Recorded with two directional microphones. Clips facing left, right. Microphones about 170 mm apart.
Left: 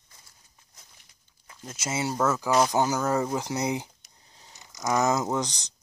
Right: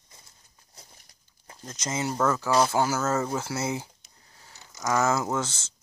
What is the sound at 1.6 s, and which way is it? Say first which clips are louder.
Speech: even; 10° left (ahead or behind).